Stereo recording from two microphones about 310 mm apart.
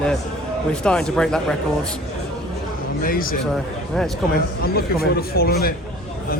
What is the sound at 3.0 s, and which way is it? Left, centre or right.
Speech, left.